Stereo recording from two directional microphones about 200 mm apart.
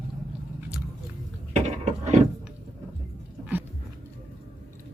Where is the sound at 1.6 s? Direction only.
35° right (ahead or behind).